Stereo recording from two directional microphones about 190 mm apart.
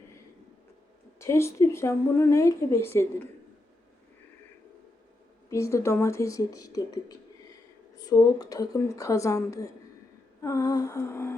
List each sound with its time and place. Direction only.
1.2 s speech: 15° left (ahead or behind)
5.5 s speech: 15° left (ahead or behind)